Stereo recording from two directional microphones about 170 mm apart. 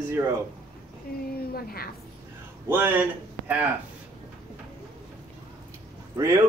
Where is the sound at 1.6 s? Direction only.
65° left (ahead or behind).